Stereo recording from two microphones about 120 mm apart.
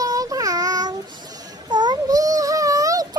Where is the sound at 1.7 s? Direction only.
35° right (ahead or behind).